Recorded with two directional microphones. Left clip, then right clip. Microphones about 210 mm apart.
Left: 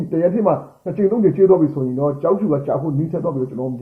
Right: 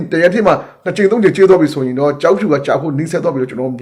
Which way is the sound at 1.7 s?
30° right (ahead or behind).